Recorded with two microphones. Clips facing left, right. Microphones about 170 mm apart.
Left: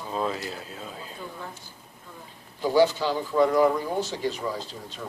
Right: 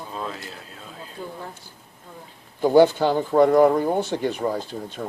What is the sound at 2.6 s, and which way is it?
Speech, 50° right (ahead or behind).